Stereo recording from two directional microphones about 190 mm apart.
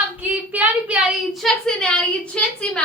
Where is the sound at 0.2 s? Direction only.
10° right (ahead or behind).